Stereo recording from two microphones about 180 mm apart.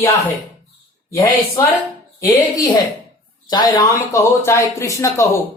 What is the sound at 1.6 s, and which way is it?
Speech, 15° left (ahead or behind).